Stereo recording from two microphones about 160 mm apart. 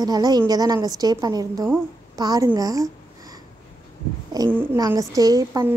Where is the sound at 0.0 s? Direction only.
25° right (ahead or behind).